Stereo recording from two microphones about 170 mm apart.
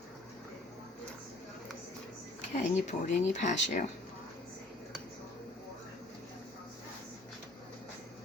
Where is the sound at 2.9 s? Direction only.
45° left (ahead or behind).